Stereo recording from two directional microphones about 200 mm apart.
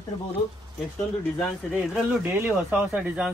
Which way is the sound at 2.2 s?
5° right (ahead or behind).